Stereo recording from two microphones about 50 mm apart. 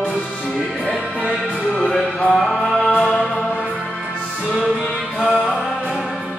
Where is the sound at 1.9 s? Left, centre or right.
Left.